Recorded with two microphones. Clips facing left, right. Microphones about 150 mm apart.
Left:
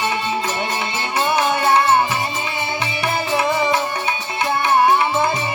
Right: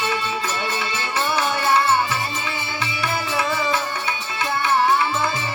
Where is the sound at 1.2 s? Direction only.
20° left (ahead or behind).